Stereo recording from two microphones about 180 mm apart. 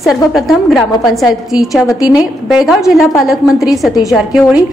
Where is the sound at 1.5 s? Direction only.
20° left (ahead or behind).